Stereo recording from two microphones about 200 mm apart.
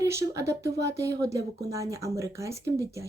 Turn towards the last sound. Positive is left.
turn(degrees=-15)  # may be behind; listen again after turning